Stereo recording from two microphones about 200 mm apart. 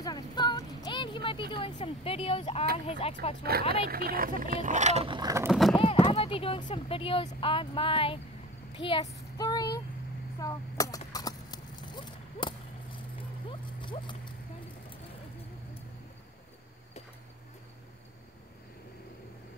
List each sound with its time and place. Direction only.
0.0 s a sound: 20° left (ahead or behind)
2.9 s speech: 30° left (ahead or behind)
3.4 s speech: 50° right (ahead or behind); by 5.5 s 15° right (ahead or behind)
5.5 s clip-clop: centre (ahead or behind)
5.8 s speech: 30° left (ahead or behind)
9.4 s vehicle: 20° left (ahead or behind)
10.4 s a sound: 15° left (ahead or behind)